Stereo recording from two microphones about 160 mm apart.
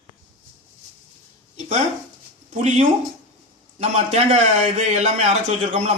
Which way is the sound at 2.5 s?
50° right (ahead or behind).